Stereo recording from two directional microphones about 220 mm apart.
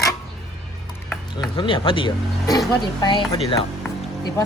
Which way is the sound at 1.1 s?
20° left (ahead or behind).